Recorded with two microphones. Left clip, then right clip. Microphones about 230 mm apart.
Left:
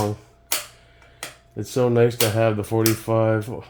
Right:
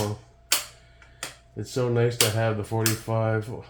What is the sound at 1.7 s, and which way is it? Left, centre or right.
Speech, left.